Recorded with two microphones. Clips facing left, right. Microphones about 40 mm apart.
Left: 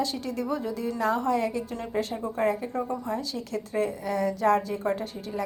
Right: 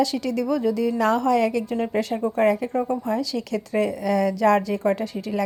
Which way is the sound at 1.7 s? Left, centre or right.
Right.